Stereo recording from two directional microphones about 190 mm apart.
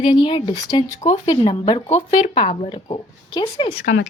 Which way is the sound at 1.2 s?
25° left (ahead or behind).